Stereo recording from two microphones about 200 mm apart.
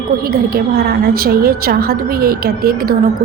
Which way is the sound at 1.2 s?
50° right (ahead or behind).